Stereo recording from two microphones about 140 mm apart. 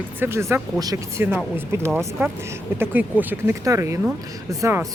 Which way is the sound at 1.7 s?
15° right (ahead or behind).